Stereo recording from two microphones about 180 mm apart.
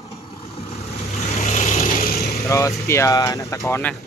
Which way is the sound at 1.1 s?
40° left (ahead or behind).